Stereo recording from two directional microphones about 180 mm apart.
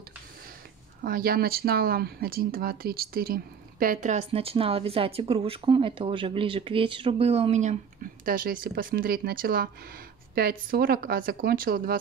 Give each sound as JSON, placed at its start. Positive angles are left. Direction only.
{"t": 1.0, "sound": "speech", "side_deg": -55}
{"t": 8.3, "sound": "speech", "side_deg": -55}